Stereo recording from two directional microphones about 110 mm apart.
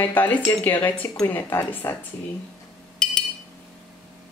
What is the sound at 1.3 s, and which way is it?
Cutlery, 20° left (ahead or behind).